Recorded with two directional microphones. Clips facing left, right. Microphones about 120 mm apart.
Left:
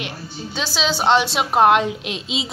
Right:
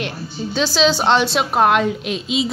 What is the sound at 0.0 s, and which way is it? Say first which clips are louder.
A woman's voice: right 5 dB; 10° left (ahead or behind).